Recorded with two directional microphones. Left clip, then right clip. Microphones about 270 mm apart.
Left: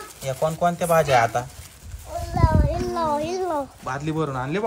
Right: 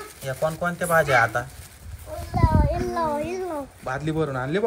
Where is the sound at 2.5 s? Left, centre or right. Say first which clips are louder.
Even; left.